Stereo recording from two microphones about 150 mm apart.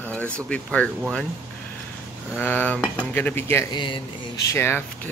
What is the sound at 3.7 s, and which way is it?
Speech, 30° left (ahead or behind).